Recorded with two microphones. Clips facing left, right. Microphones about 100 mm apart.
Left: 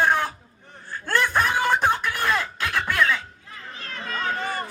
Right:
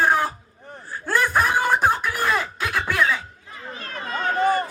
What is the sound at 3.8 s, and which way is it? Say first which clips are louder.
Run: right 2 dB; 45° right (ahead or behind).